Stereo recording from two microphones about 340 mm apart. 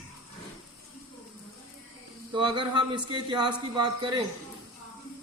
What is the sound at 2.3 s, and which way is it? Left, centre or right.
A man's voice, centre.